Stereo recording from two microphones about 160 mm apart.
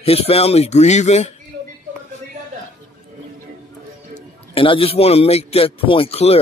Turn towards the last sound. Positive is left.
turn(degrees=40)  # may be behind; listen again after turning